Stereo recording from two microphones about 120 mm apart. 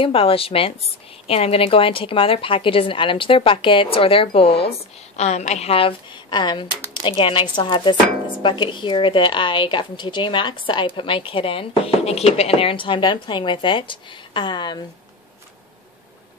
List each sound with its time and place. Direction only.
0.0 s a woman's voice: 50° left (ahead or behind)